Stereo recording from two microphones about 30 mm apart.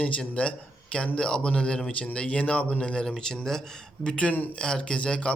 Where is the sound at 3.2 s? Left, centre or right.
Centre.